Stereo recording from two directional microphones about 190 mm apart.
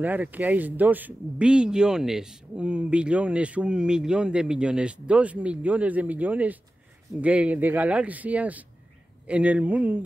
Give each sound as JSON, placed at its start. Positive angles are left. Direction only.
{"t": 0.0, "sound": "speech", "side_deg": -10}